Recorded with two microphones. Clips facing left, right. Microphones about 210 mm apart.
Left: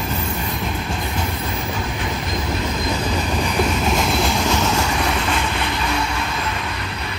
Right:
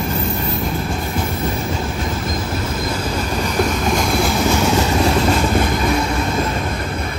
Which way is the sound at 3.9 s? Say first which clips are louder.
Right 2 dB; centre (ahead or behind).